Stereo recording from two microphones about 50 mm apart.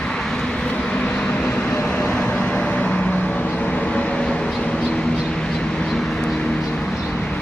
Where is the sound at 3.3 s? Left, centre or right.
Left.